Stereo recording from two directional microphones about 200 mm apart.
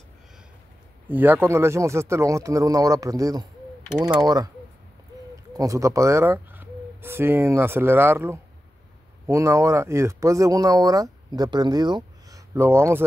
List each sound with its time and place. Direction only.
1.0 s speech: 10° right (ahead or behind)